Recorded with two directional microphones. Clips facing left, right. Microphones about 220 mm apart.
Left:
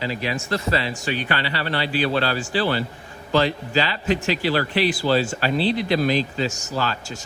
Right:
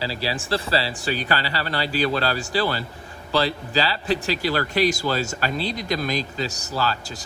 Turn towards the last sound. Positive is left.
turn(degrees=-35)  # may be behind; listen again after turning